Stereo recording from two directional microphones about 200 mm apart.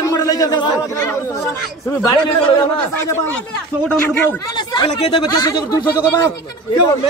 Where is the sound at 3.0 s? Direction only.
10° left (ahead or behind).